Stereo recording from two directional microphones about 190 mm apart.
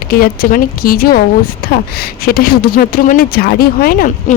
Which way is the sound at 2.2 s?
50° left (ahead or behind).